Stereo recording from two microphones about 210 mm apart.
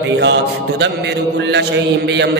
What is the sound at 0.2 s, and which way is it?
Mantra, 55° right (ahead or behind).